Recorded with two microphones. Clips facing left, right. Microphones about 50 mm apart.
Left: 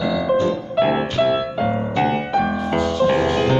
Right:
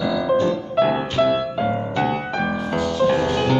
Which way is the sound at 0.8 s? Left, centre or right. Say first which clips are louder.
Left 1 dB; centre.